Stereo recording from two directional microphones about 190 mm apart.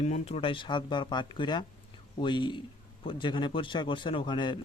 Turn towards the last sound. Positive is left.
turn(degrees=25)  # may be behind; listen again after turning